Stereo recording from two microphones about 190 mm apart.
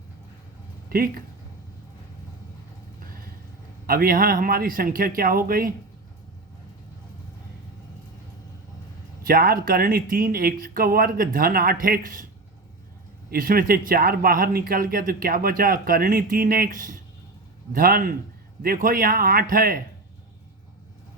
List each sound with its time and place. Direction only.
0.9 s speech: 50° right (ahead or behind)
3.8 s speech: 50° right (ahead or behind)
9.2 s speech: 50° right (ahead or behind)
13.3 s speech: 50° right (ahead or behind)